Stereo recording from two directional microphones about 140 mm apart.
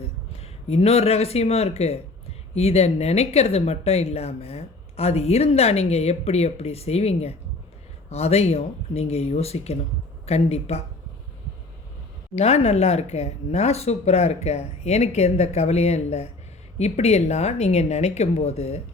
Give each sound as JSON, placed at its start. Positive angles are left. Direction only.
{"t": 0.3, "sound": "speech", "side_deg": 45}
{"t": 12.4, "sound": "speech", "side_deg": 50}